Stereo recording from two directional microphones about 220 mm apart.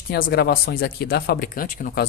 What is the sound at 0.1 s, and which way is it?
Speech, 45° left (ahead or behind).